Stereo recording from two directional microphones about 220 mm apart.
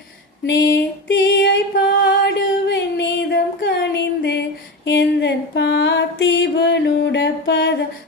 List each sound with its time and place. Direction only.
0.4 s female singing: 50° left (ahead or behind)
2.2 s music: 50° left (ahead or behind)
4.9 s a sound: 50° left (ahead or behind)